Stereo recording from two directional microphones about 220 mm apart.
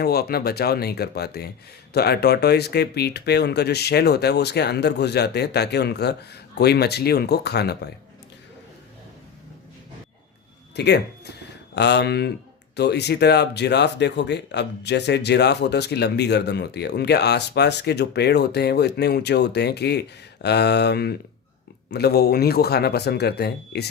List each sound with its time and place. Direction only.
0.0 s speech: 45° left (ahead or behind)
10.8 s speech: 50° left (ahead or behind)